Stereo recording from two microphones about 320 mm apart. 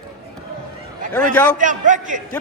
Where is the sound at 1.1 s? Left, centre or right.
Centre.